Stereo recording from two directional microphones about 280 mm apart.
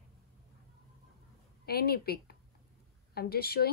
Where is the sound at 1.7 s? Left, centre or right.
Left.